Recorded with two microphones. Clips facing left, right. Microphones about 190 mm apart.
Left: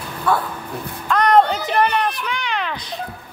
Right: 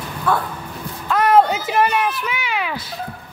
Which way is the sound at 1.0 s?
5° right (ahead or behind).